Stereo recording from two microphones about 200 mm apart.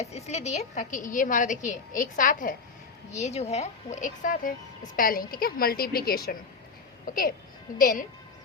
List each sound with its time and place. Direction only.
0.0 s a woman's voice: 35° left (ahead or behind)